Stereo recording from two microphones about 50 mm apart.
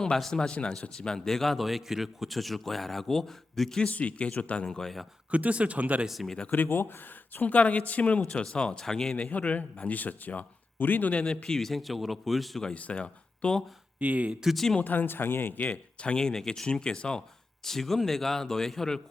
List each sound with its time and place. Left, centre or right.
0.3 s a man's voice: centre
3.8 s speech: left
4.6 s speech: centre
5.3 s speech: right
6.1 s a man's voice: centre
6.5 s speech: left
7.4 s speech: left
8.2 s speech: centre
9.1 s speech: left
11.2 s a man's voice: left; by 12.6 s centre
12.7 s speech: left
14.0 s speech: right
14.4 s a man's voice: centre
14.8 s speech: left; by 19.0 s centre